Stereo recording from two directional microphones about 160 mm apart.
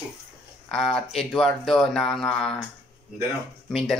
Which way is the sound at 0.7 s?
5° left (ahead or behind).